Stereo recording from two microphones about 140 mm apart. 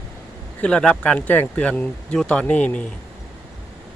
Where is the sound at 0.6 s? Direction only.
5° left (ahead or behind).